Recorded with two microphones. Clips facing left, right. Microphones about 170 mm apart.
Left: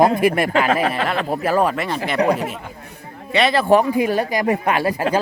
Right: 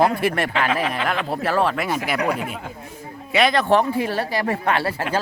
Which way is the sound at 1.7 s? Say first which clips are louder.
Left 1 dB; 5° right (ahead or behind).